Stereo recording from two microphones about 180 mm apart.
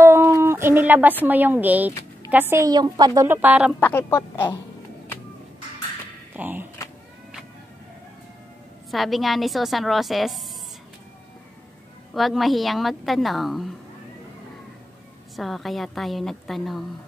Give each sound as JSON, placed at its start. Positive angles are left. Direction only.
{"t": 0.0, "sound": "a sound", "side_deg": -15}
{"t": 1.2, "sound": "a woman's voice", "side_deg": -10}
{"t": 2.5, "sound": "a woman's voice", "side_deg": -20}
{"t": 3.3, "sound": "a woman's voice", "side_deg": -10}
{"t": 3.8, "sound": "speech", "side_deg": 15}
{"t": 6.3, "sound": "a woman's voice", "side_deg": -10}
{"t": 8.9, "sound": "a woman's voice", "side_deg": 0}
{"t": 12.1, "sound": "a woman's voice", "side_deg": 0}
{"t": 15.3, "sound": "a woman's voice", "side_deg": 0}